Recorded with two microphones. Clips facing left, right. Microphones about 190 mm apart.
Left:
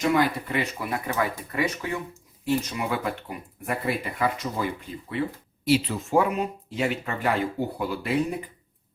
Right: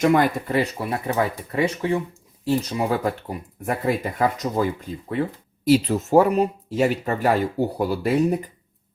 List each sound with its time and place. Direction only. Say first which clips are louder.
0.0 s speech: right 4 dB; 50° right (ahead or behind)
5.6 s speech: right 5 dB; 40° right (ahead or behind)